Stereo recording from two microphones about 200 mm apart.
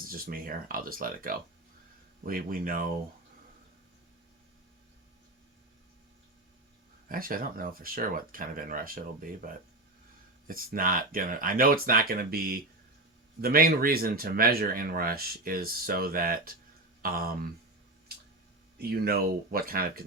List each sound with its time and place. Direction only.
0.0 s speech: 45° right (ahead or behind)
7.1 s speech: 45° right (ahead or behind)
10.5 s speech: 45° right (ahead or behind)
18.8 s speech: 50° right (ahead or behind)